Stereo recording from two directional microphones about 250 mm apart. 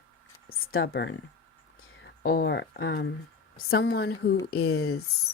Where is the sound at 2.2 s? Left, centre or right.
Left.